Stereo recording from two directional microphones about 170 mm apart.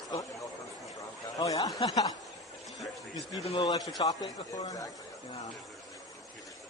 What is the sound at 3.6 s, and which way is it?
A man's voice, 20° left (ahead or behind).